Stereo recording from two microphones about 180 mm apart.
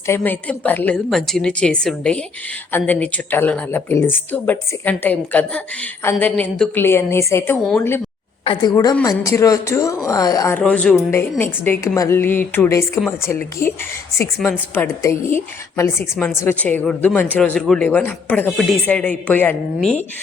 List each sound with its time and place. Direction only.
0.1 s a woman's voice: 10° left (ahead or behind)
10.6 s speech: 5° left (ahead or behind)
14.3 s a woman's voice: centre (ahead or behind)
14.8 s speech: 15° left (ahead or behind)